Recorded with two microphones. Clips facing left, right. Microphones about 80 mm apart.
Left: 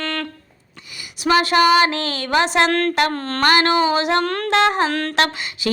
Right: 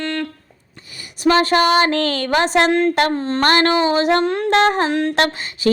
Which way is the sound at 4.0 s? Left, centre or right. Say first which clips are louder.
Right 3 dB; right.